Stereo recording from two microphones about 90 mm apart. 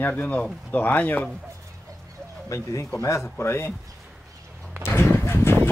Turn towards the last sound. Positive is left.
turn(degrees=25)  # may be behind; listen again after turning